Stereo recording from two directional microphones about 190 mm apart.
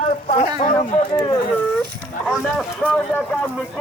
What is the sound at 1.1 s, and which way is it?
Speech, 25° left (ahead or behind).